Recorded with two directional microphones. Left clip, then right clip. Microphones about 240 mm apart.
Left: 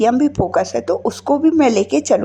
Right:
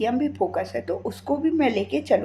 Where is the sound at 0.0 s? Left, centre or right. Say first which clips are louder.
Left 8 dB; left.